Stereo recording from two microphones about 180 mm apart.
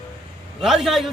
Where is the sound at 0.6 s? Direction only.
Centre (ahead or behind).